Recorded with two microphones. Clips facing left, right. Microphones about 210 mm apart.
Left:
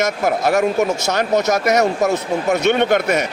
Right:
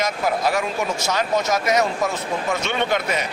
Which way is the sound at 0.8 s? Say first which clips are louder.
Left 4 dB; 65° left (ahead or behind).